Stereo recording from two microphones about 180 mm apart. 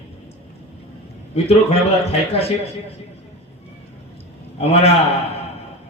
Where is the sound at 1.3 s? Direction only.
35° left (ahead or behind).